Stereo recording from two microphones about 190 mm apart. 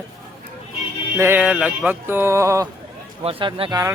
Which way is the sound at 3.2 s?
30° right (ahead or behind).